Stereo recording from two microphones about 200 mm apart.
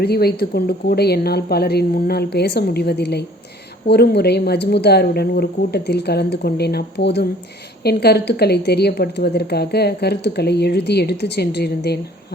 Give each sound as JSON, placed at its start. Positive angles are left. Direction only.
{"t": 0.0, "sound": "a woman's voice", "side_deg": 50}